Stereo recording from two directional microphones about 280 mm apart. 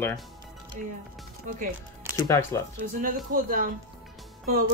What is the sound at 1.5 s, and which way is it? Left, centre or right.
Speech, right.